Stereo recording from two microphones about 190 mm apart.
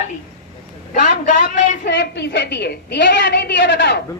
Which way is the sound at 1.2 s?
40° left (ahead or behind).